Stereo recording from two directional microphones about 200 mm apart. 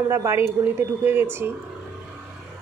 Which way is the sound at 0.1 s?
15° right (ahead or behind).